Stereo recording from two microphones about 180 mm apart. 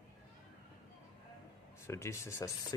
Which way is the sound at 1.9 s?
15° left (ahead or behind).